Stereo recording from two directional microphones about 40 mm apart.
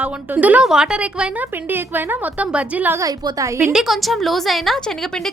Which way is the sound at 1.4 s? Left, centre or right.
Right.